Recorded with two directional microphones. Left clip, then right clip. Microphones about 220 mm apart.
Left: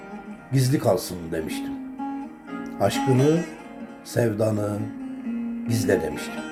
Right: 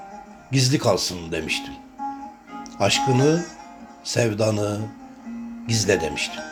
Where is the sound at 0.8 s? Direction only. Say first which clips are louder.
Right 1 dB; 20° right (ahead or behind).